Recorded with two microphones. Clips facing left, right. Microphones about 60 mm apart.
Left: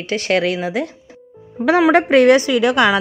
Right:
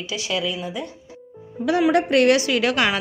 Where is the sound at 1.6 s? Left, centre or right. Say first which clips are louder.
Left 6 dB; left.